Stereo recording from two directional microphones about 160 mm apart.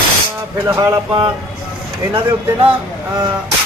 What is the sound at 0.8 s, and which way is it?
Speech, 25° right (ahead or behind).